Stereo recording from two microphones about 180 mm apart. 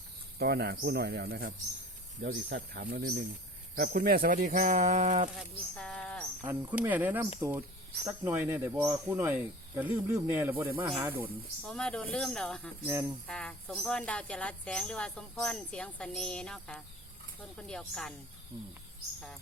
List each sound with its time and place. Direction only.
0.3 s speech: 60° right (ahead or behind); by 5.3 s 40° right (ahead or behind)
5.4 s a sound: 5° left (ahead or behind)
6.7 s speech: 10° right (ahead or behind)
11.6 s speech: 5° left (ahead or behind)
12.8 s speech: 15° right (ahead or behind)
13.2 s speech: 5° left (ahead or behind)